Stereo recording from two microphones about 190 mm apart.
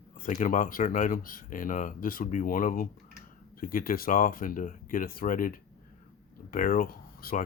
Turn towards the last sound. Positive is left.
turn(degrees=50)  # may be behind; listen again after turning